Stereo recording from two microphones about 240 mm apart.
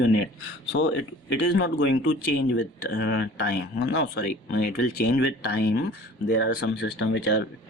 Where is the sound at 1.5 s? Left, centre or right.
Left.